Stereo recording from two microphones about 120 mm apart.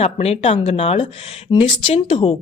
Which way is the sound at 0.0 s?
60° left (ahead or behind).